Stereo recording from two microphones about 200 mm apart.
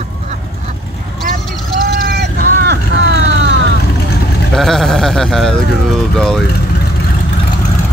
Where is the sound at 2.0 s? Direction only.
50° right (ahead or behind).